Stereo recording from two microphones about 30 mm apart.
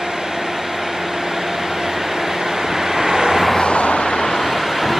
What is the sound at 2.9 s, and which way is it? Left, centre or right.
Vehicle, right.